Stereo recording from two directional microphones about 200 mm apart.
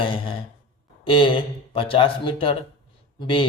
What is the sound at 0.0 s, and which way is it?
Speech, 25° left (ahead or behind).